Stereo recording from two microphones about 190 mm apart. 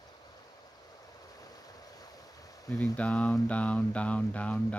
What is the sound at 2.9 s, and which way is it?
Speech, 5° left (ahead or behind).